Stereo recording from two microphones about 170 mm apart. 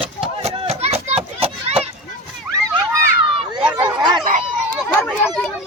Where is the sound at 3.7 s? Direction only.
25° right (ahead or behind).